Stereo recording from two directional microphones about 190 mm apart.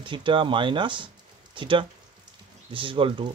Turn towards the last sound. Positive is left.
turn(degrees=-25)  # may be behind; listen again after turning